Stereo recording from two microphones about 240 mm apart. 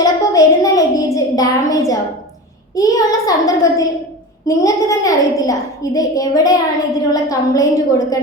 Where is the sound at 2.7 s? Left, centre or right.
Centre.